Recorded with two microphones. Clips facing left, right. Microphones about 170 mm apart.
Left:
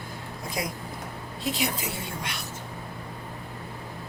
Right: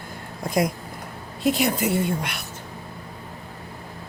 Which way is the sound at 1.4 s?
55° right (ahead or behind).